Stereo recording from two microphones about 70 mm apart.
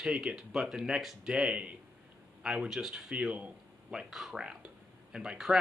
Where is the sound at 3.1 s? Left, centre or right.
Centre.